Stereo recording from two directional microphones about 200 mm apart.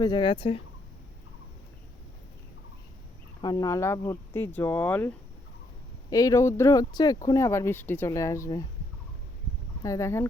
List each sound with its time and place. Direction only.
0.0 s speech: 25° left (ahead or behind)
3.4 s speech: 20° left (ahead or behind)
9.8 s speech: 15° left (ahead or behind)